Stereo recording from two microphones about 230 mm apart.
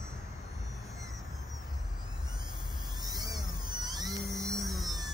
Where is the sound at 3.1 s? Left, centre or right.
Centre.